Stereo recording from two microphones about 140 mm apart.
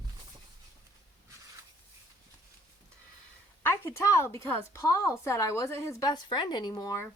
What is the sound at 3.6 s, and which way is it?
A woman's voice, 15° left (ahead or behind).